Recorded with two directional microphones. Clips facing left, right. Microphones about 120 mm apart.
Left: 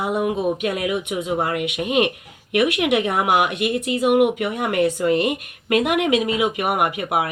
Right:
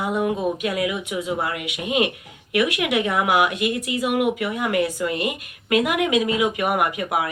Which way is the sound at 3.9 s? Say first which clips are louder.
Left 7 dB; 25° left (ahead or behind).